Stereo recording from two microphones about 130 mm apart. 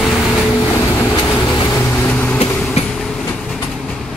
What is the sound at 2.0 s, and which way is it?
Vehicle, 10° left (ahead or behind).